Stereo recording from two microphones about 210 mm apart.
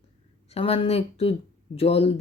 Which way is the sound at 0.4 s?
30° left (ahead or behind).